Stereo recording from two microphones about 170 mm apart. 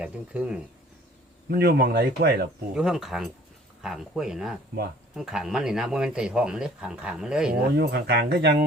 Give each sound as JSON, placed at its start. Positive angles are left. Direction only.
{"t": 0.0, "sound": "speech", "side_deg": -5}
{"t": 1.5, "sound": "speech", "side_deg": -65}
{"t": 2.7, "sound": "speech", "side_deg": -5}
{"t": 7.8, "sound": "speech", "side_deg": -70}